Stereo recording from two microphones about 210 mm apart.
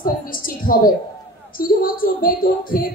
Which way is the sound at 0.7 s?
45° left (ahead or behind).